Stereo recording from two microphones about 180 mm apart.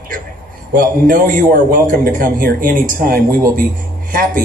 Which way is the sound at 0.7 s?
50° right (ahead or behind).